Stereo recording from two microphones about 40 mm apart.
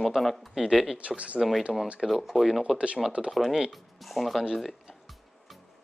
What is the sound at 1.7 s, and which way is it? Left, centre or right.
Speech, centre.